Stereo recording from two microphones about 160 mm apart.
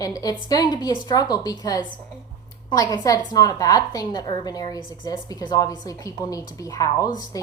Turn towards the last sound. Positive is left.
turn(degrees=20)  # may be behind; listen again after turning